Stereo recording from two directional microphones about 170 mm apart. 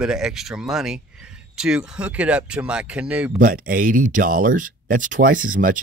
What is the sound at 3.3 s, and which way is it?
A man's voice, 55° right (ahead or behind).